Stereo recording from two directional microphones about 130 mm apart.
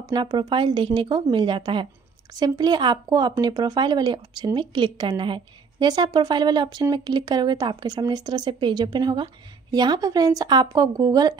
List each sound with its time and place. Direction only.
0.0 s a woman's voice: 35° right (ahead or behind)